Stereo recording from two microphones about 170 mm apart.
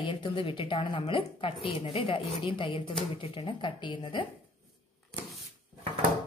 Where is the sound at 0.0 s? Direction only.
30° left (ahead or behind).